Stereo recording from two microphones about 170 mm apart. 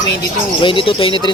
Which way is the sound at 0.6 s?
30° left (ahead or behind).